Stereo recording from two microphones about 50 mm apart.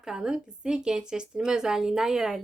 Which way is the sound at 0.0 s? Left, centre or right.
Centre.